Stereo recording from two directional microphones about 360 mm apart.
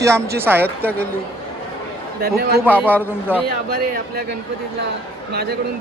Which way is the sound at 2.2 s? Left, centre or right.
Right.